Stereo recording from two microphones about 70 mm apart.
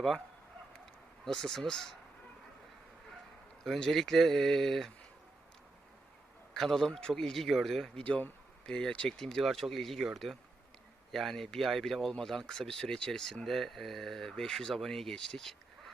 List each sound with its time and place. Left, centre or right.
1.2 s speech: centre
3.6 s speech: centre
6.5 s speech: centre
8.0 s speech: centre
10.3 s speech: right
11.1 s speech: centre